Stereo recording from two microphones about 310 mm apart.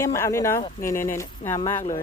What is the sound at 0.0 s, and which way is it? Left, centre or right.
Speech, centre.